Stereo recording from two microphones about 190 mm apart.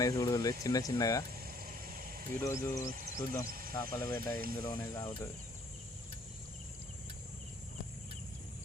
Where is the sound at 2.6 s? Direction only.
15° left (ahead or behind).